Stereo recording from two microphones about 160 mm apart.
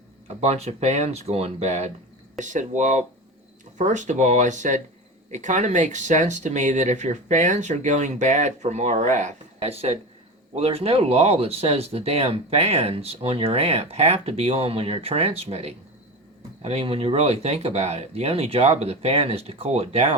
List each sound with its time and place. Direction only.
0.4 s speech: 40° right (ahead or behind)